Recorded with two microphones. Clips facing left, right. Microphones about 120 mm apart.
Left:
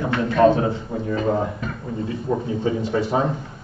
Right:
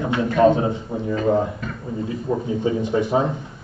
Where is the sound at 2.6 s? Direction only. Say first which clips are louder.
Right 2 dB; 20° right (ahead or behind).